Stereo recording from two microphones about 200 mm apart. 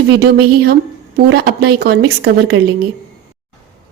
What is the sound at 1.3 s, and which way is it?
Speech, 55° right (ahead or behind).